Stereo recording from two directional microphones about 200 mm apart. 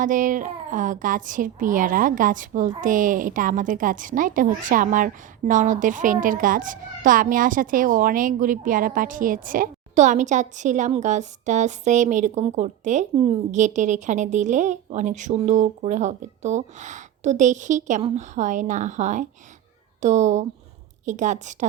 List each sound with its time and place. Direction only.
0.0 s a woman's voice: 40° right (ahead or behind)